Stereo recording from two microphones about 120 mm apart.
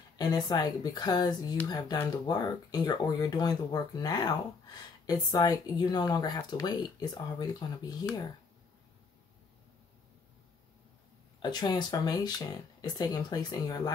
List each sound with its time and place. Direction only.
0.2 s speech: 35° left (ahead or behind)
11.4 s speech: 35° left (ahead or behind)